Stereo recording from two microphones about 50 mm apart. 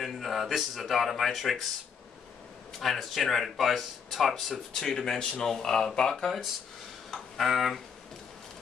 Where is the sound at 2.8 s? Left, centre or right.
Centre.